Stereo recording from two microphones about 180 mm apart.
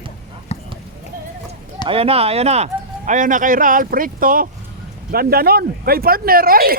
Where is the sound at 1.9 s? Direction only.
30° right (ahead or behind).